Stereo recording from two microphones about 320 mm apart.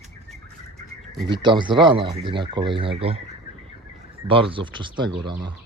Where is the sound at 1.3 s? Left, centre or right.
Centre.